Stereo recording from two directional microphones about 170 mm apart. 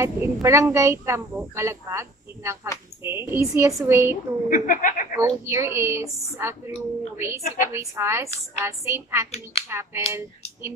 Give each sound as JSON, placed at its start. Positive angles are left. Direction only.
{"t": 0.0, "sound": "a woman's voice", "side_deg": -15}
{"t": 4.5, "sound": "speech", "side_deg": 50}
{"t": 5.1, "sound": "a woman's voice", "side_deg": -15}
{"t": 9.3, "sound": "speech", "side_deg": 40}
{"t": 9.7, "sound": "a woman's voice", "side_deg": -15}